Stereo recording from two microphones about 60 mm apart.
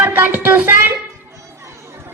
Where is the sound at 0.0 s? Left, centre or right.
Right.